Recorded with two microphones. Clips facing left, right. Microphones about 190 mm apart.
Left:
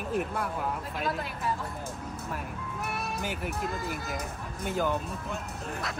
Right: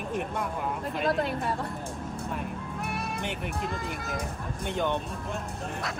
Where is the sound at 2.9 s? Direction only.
5° left (ahead or behind).